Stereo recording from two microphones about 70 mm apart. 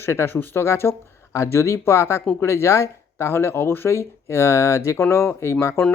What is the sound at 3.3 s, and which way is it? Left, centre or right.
Speech, left.